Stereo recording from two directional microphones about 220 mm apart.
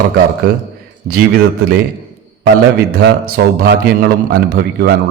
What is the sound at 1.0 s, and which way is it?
A man's voice, 45° right (ahead or behind).